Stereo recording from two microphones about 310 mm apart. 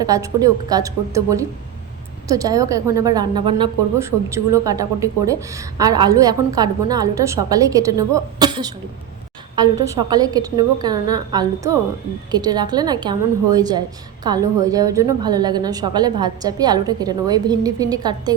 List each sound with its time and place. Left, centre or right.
0.0 s a woman's voice: centre